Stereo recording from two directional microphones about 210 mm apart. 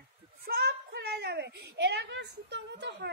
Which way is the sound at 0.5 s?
50° right (ahead or behind).